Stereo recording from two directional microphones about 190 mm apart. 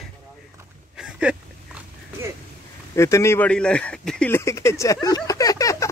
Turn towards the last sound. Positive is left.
turn(degrees=15)  # may be behind; listen again after turning